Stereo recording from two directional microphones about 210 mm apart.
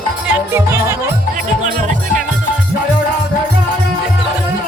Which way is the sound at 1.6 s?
40° right (ahead or behind).